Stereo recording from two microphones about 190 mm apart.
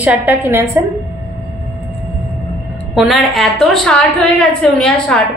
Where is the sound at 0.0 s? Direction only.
10° right (ahead or behind).